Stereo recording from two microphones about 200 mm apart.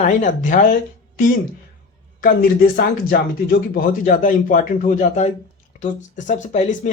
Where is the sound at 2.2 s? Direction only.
50° left (ahead or behind).